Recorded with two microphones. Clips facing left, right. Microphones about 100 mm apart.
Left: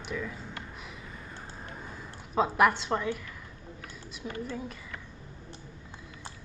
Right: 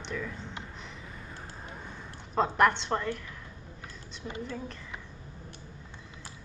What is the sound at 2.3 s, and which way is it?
Speech, 5° left (ahead or behind).